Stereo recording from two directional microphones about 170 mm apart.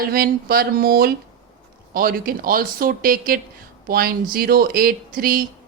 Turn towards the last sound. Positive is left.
turn(degrees=-55)  # may be behind; listen again after turning